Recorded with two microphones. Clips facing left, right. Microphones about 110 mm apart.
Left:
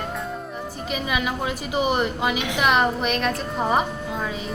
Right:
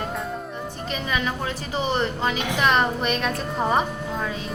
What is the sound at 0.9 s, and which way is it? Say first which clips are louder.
A woman's voice: left 1 dB; 10° left (ahead or behind).